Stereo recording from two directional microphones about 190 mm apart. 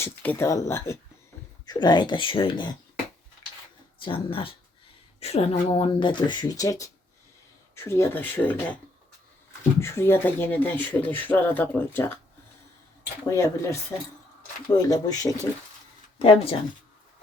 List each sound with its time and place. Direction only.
0.0 s speech: 10° left (ahead or behind); by 2.6 s 25° left (ahead or behind)
4.0 s speech: 30° left (ahead or behind); by 8.8 s 10° left (ahead or behind)
9.8 s speech: 15° left (ahead or behind)
13.3 s speech: 15° left (ahead or behind)
14.8 s speech: 20° left (ahead or behind)